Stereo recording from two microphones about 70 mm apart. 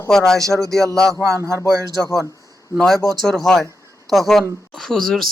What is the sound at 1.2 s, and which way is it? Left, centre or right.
Speech, right.